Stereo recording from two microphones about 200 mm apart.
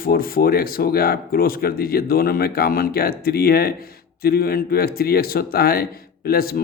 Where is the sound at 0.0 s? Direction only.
45° left (ahead or behind).